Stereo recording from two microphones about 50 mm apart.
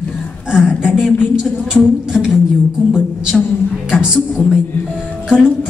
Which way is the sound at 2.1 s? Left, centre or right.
Centre.